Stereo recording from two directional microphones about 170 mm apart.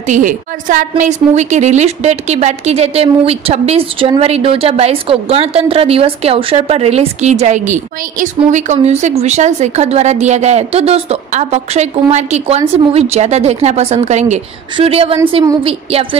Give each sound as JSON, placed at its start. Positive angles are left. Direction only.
{"t": 0.0, "sound": "a woman's voice", "side_deg": -50}